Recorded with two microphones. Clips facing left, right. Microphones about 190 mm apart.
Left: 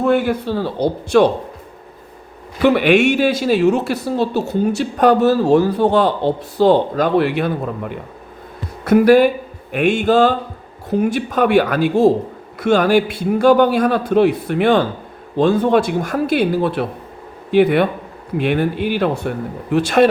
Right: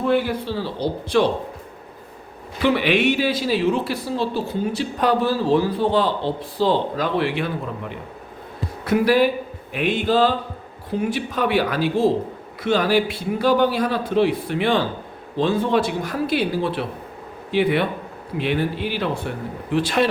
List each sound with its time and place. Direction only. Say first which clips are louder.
0.0 s speech: left 4 dB; 45° left (ahead or behind)
2.6 s speech: left 6 dB; 50° left (ahead or behind)